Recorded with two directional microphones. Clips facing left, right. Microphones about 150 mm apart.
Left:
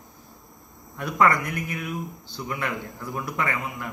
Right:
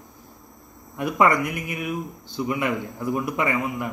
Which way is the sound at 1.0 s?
20° right (ahead or behind).